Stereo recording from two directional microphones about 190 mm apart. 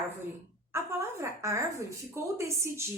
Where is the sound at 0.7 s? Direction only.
15° right (ahead or behind).